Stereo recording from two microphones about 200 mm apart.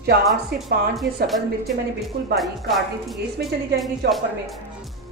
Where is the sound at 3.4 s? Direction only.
55° right (ahead or behind).